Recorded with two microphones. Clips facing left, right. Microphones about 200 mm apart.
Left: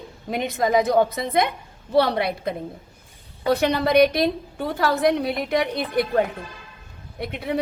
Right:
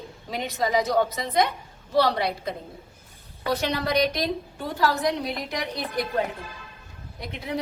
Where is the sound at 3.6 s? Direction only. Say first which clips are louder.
Left 7 dB; 55° left (ahead or behind).